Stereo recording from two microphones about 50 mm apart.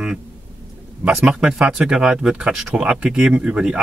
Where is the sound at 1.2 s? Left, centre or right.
Centre.